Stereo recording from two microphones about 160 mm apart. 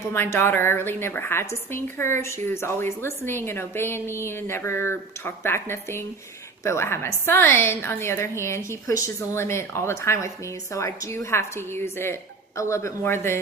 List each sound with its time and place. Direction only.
0.1 s a woman's voice: 15° left (ahead or behind)